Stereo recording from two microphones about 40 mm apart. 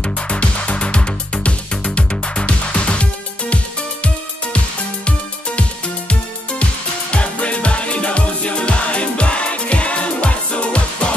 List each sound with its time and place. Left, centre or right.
0.3 s music: left
6.6 s music: left